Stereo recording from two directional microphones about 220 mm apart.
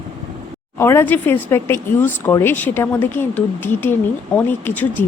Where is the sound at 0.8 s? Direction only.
10° left (ahead or behind).